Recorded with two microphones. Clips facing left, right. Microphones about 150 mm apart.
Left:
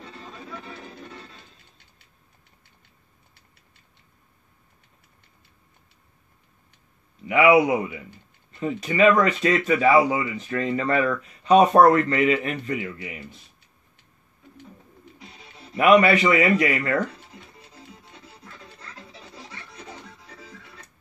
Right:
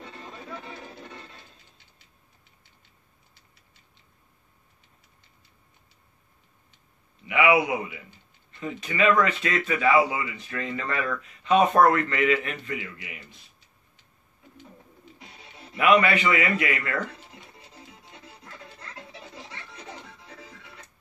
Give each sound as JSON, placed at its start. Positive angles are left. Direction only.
{"t": 7.2, "sound": "speech", "side_deg": 40}
{"t": 15.7, "sound": "speech", "side_deg": 40}